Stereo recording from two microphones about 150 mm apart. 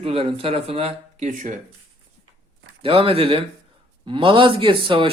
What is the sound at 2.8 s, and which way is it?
A man's voice, 35° right (ahead or behind).